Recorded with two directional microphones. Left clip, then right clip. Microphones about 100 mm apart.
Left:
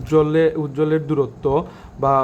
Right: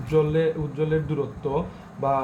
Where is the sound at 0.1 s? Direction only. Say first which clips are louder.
Left 6 dB; 35° left (ahead or behind).